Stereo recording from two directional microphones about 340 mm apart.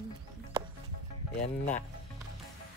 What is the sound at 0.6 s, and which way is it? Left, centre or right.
Music, centre.